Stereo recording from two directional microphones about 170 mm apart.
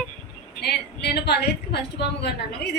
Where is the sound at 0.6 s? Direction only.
75° left (ahead or behind).